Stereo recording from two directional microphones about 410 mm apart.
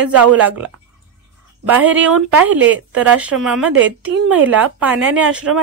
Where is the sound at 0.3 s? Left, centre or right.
Centre.